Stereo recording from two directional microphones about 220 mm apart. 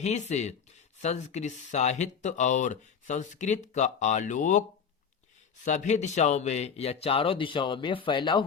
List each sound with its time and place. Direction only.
0.0 s speech: 30° left (ahead or behind)
5.6 s a man's voice: 35° left (ahead or behind)